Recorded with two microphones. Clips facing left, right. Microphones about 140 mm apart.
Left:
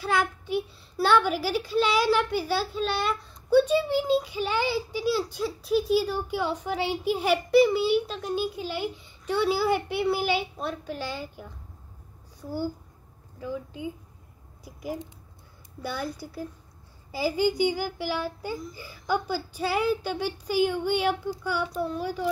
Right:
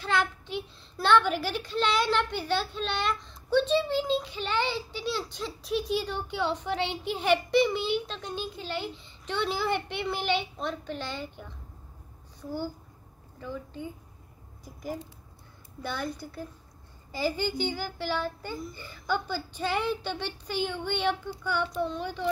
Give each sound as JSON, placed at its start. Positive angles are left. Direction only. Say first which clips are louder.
{"t": 0.0, "sound": "a child's voice", "louder": "left 2 dB", "side_deg": 10}